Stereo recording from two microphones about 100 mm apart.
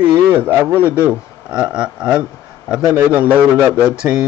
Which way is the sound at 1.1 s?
10° right (ahead or behind).